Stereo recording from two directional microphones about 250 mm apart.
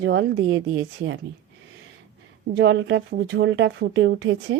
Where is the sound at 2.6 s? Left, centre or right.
Right.